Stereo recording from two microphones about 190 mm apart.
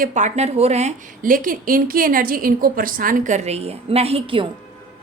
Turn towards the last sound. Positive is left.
turn(degrees=-30)  # may be behind; listen again after turning